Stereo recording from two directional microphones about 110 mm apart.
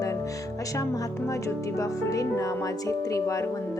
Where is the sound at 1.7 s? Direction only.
30° left (ahead or behind).